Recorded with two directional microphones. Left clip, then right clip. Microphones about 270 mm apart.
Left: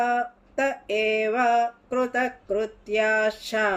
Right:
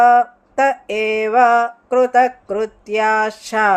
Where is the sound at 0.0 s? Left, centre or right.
Right.